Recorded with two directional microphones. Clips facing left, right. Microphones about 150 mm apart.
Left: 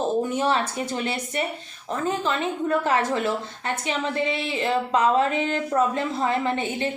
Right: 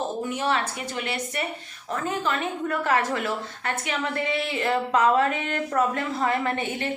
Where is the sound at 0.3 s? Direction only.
30° left (ahead or behind).